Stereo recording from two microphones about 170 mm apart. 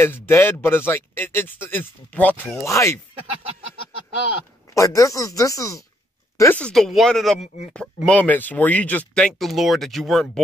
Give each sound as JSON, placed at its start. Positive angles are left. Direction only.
{"t": 0.0, "sound": "speech", "side_deg": 15}
{"t": 4.7, "sound": "speech", "side_deg": 20}
{"t": 6.6, "sound": "speech", "side_deg": 0}